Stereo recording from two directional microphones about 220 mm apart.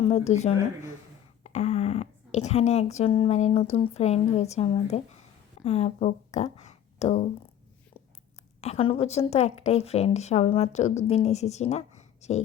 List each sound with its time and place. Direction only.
0.0 s speech: 30° left (ahead or behind)
8.6 s speech: 25° left (ahead or behind)